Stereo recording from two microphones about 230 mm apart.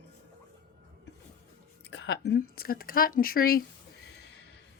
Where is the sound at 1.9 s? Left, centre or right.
Left.